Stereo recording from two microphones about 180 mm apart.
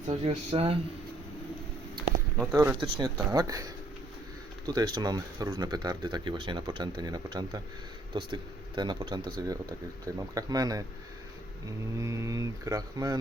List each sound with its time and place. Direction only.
0.1 s speech: 30° right (ahead or behind)
2.4 s speech: 15° right (ahead or behind)
11.9 s mantra: 15° right (ahead or behind)